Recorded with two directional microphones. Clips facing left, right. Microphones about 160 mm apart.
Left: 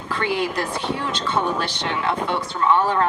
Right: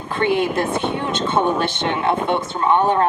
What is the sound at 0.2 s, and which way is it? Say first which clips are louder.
Speech: right 6 dB; 20° right (ahead or behind).